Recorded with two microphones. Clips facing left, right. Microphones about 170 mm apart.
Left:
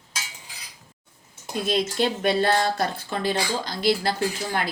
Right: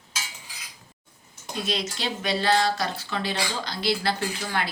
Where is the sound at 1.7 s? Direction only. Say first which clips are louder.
Left 7 dB; 50° left (ahead or behind).